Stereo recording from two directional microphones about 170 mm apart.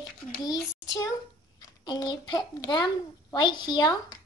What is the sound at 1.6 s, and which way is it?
A child's voice, 20° left (ahead or behind).